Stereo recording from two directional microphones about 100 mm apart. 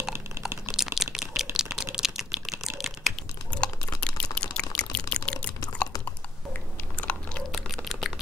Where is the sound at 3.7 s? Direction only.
40° left (ahead or behind).